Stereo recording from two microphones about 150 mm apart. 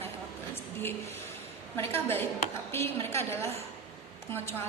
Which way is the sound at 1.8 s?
15° left (ahead or behind).